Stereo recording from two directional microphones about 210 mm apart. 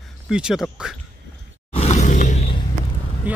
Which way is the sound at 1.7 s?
30° left (ahead or behind).